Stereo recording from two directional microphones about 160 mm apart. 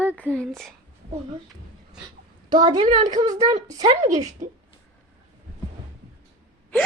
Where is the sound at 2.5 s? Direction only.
25° right (ahead or behind).